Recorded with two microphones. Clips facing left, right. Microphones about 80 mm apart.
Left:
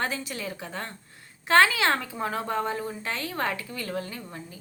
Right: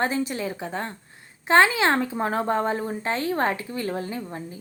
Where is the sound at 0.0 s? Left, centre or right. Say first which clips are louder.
Right 6 dB; right.